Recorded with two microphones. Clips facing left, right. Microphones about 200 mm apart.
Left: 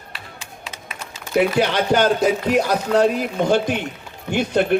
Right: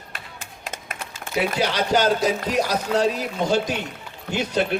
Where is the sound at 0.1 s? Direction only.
50° right (ahead or behind).